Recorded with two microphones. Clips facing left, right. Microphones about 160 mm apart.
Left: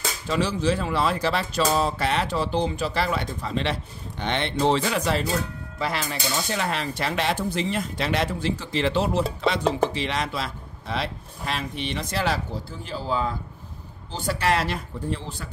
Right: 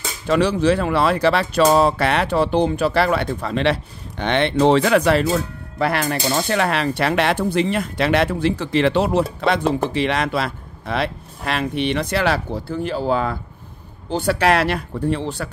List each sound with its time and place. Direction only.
0.3 s speech: 65° right (ahead or behind)